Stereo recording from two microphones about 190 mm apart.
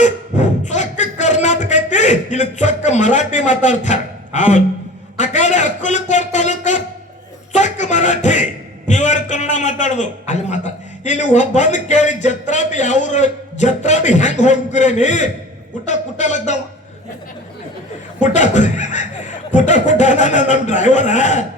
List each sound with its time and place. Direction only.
0.0 s a sound: 40° left (ahead or behind)
8.9 s a man's voice: 40° left (ahead or behind)
18.2 s chuckle: 40° left (ahead or behind)
19.5 s speech: 40° left (ahead or behind)